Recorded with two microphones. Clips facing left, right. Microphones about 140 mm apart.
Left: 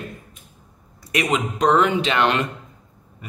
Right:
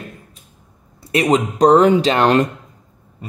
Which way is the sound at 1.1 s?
35° right (ahead or behind).